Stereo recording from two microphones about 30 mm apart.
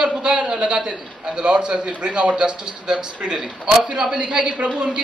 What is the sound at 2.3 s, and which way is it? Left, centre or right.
Speech, right.